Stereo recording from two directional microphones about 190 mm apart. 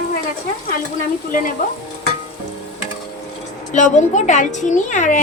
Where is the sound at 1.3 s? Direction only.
45° left (ahead or behind).